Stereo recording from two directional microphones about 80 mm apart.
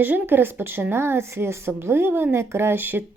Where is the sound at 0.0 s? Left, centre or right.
Right.